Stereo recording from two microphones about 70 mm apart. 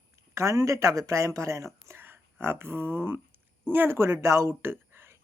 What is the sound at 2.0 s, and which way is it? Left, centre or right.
A woman's voice, right.